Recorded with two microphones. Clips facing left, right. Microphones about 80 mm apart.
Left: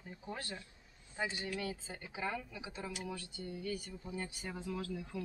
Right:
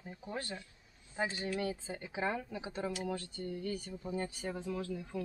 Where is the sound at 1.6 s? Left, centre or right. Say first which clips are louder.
Right 4 dB; right.